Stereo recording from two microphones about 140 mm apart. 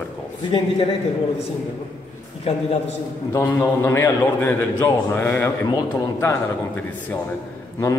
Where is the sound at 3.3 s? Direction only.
15° left (ahead or behind).